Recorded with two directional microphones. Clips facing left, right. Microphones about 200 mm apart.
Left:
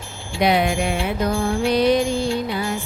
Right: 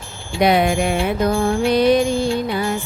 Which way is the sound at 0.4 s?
50° right (ahead or behind).